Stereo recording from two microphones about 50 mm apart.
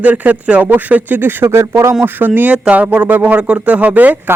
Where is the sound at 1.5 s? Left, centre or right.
Right.